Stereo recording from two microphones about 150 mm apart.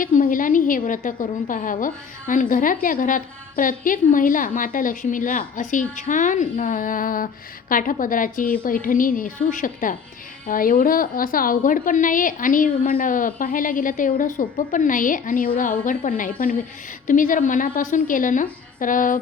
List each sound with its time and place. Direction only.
0.0 s a woman's voice: 60° left (ahead or behind)